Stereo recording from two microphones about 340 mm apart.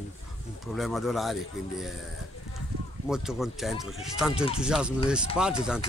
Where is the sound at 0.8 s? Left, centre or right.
Centre.